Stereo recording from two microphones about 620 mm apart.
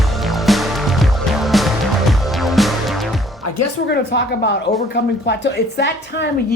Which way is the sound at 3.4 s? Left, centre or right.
Left.